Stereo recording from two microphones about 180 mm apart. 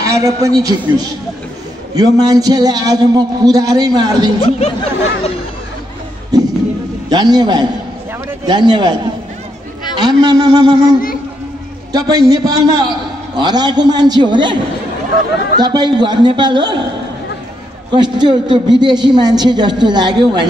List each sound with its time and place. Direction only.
0.0 s a man's voice: 15° right (ahead or behind)
4.4 s speech: 35° left (ahead or behind)
6.3 s a sound: 20° right (ahead or behind)
7.1 s a man's voice: 20° right (ahead or behind)
9.9 s a man's voice: 20° right (ahead or behind)
17.9 s a man's voice: 25° right (ahead or behind)